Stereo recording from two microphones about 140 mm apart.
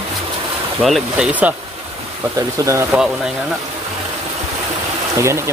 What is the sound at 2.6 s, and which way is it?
Speech, 25° right (ahead or behind).